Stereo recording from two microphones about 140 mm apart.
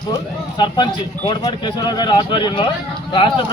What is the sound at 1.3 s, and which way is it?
Speech, 30° left (ahead or behind).